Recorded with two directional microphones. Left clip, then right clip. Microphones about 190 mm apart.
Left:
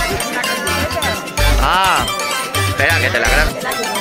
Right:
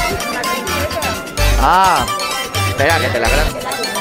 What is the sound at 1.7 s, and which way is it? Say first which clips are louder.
Speech: right 3 dB; 40° right (ahead or behind).